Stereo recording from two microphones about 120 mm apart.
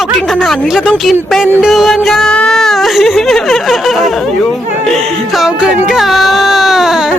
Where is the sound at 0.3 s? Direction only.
Centre (ahead or behind).